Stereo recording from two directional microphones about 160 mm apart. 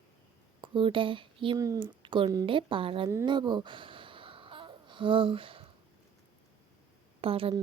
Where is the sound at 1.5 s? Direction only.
20° right (ahead or behind).